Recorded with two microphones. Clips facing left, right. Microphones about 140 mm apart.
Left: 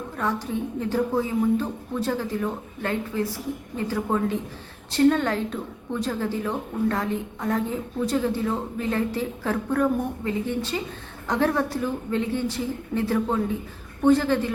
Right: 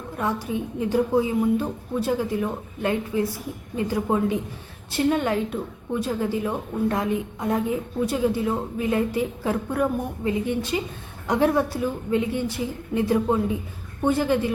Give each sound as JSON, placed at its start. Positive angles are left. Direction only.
{"t": 0.2, "sound": "a woman's voice", "side_deg": -10}